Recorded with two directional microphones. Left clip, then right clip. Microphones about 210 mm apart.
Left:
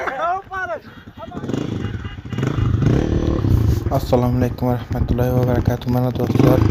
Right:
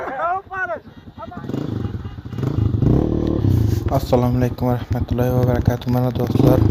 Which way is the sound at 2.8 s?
45° left (ahead or behind).